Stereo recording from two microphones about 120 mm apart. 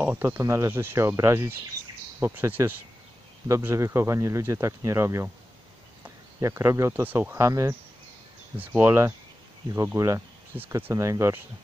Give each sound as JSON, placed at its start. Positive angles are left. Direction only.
{"t": 0.2, "sound": "speech", "side_deg": -25}